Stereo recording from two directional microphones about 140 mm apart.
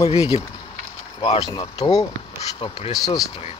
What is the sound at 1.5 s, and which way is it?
Speech, 30° left (ahead or behind).